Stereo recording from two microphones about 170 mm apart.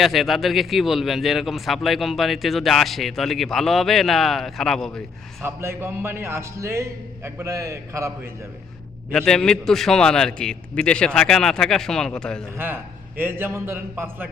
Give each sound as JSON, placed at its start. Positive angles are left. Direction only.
{"t": 0.0, "sound": "speech", "side_deg": 0}
{"t": 5.4, "sound": "a man's voice", "side_deg": -15}
{"t": 9.1, "sound": "speech", "side_deg": 5}
{"t": 12.5, "sound": "a man's voice", "side_deg": -15}